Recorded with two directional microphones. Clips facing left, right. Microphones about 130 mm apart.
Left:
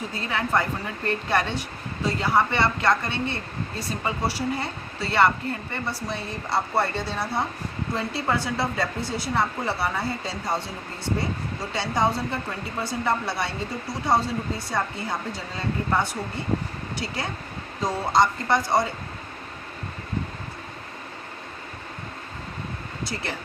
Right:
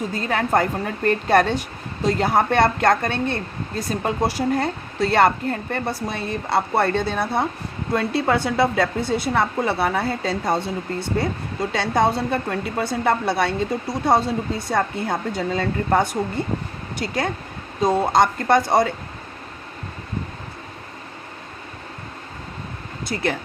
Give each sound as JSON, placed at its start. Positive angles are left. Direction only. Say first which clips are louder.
{"t": 0.1, "sound": "speech", "louder": "right 4 dB", "side_deg": -45}